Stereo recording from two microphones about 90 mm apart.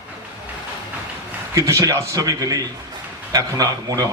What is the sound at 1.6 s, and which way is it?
A man's voice, 35° right (ahead or behind).